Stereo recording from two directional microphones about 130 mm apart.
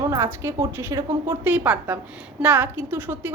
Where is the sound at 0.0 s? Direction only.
20° right (ahead or behind).